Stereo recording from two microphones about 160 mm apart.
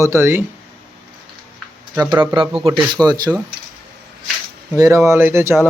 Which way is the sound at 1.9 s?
20° right (ahead or behind).